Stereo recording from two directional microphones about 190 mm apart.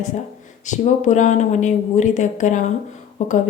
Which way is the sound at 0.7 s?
40° left (ahead or behind).